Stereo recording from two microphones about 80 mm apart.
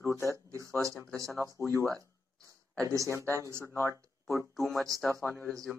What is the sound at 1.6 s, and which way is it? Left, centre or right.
Speech, left.